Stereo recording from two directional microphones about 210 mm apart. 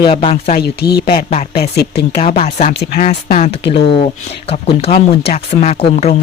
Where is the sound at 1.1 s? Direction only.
30° left (ahead or behind).